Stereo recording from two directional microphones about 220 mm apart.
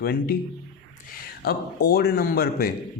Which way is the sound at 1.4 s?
45° left (ahead or behind).